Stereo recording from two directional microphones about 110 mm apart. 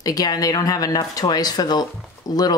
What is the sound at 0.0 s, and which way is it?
Speech, 35° left (ahead or behind).